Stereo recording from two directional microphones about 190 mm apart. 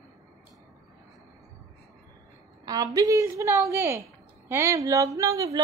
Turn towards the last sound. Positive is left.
turn(degrees=-15)  # may be behind; listen again after turning